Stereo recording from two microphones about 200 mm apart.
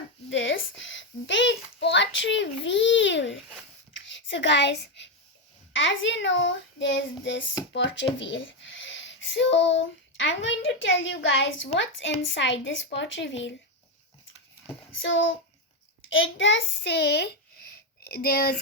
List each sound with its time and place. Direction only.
0.3 s a child's voice: 70° left (ahead or behind)
3.9 s a sound: 65° left (ahead or behind)
5.7 s child singing: 70° left (ahead or behind)
7.7 s speech: 65° left (ahead or behind)
13.0 s child singing: 65° left (ahead or behind)
15.0 s speech: 70° left (ahead or behind); by 18.5 s 50° left (ahead or behind)